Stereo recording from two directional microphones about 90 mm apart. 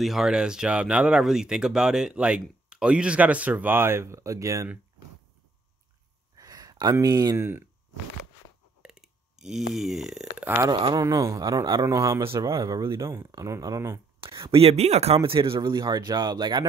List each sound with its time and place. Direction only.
0.0 s speech: 5° right (ahead or behind); by 4.6 s 35° right (ahead or behind)
6.3 s a sound: 45° right (ahead or behind)
7.3 s speech: 25° right (ahead or behind)
8.8 s a sound: 5° right (ahead or behind)
11.0 s speech: 40° right (ahead or behind)
14.4 s speech: 90° right
15.2 s speech: 80° right; by 16.6 s 55° right (ahead or behind)